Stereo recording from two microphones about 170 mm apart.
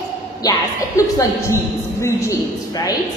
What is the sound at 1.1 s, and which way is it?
A woman's voice, 15° left (ahead or behind).